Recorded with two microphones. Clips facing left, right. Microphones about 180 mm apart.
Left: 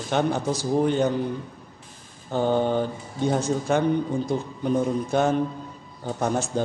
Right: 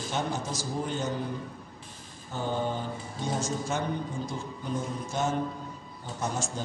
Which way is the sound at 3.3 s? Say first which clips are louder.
Left 8 dB; 60° left (ahead or behind).